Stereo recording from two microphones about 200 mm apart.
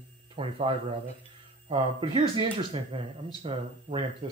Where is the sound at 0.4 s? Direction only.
25° right (ahead or behind).